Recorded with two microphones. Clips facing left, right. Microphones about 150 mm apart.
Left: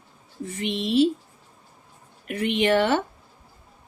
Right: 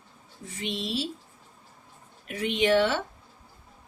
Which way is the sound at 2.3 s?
60° left (ahead or behind).